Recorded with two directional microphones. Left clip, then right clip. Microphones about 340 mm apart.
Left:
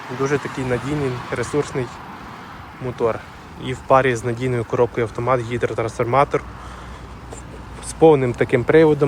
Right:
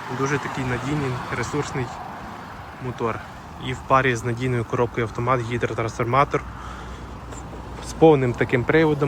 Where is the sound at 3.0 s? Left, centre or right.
Centre.